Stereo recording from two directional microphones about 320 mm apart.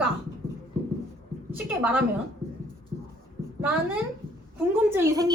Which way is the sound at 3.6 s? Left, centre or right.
Centre.